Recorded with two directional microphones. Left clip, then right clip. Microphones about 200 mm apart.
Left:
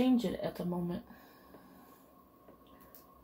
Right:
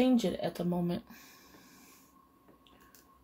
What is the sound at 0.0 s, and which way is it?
Speech, 60° right (ahead or behind).